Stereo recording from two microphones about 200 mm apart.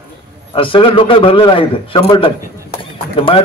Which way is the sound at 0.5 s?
25° left (ahead or behind).